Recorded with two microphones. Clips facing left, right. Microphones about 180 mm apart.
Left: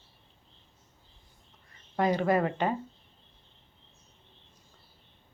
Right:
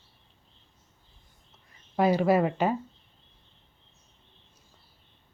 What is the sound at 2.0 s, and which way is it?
Speech, 10° right (ahead or behind).